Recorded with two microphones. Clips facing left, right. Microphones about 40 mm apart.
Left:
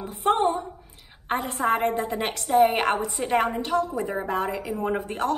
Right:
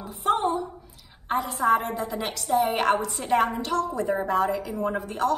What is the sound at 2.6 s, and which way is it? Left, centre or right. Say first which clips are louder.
Speech: left 3 dB; left.